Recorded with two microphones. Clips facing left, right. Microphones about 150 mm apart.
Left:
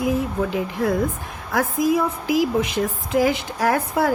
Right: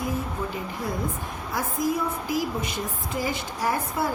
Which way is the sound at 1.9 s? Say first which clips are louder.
Left 7 dB; 90° left.